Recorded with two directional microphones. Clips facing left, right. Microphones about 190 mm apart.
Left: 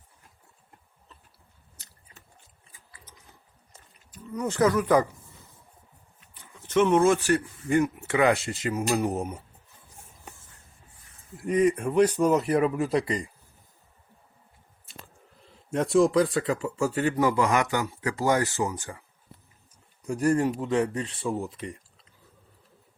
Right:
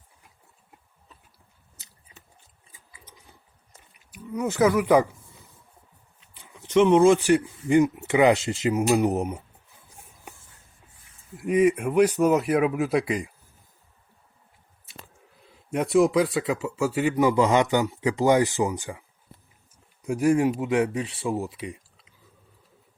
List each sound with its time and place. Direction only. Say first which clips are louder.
4.1 s speech: right 3 dB; 10° right (ahead or behind)
6.4 s speech: right 3 dB; 15° right (ahead or behind)
11.3 s a man's voice: right 2 dB; 5° right (ahead or behind)
14.8 s speech: right 1 dB; 10° right (ahead or behind)
20.1 s speech: right 3 dB; 10° right (ahead or behind)